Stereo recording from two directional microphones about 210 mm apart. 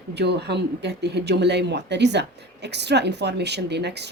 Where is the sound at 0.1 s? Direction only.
55° right (ahead or behind).